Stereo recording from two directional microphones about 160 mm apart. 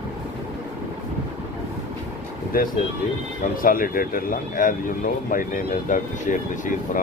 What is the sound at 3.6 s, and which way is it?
Speech, 60° left (ahead or behind).